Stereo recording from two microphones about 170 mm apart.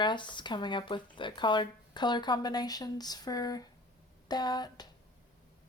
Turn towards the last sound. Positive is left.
turn(degrees=25)  # may be behind; listen again after turning